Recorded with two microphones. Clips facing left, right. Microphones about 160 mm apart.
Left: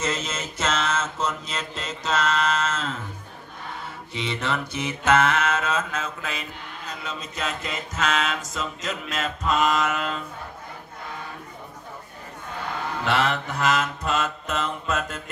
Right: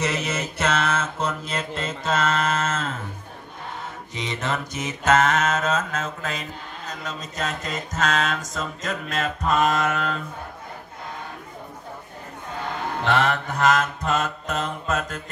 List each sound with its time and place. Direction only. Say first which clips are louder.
0.0 s mantra: right 3 dB; 65° right (ahead or behind); by 3.0 s 50° right (ahead or behind)
4.1 s mantra: even; 45° right (ahead or behind)
13.1 s mantra: right 2 dB; 50° right (ahead or behind)